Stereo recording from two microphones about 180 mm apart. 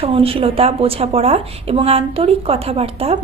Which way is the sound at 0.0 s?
30° right (ahead or behind).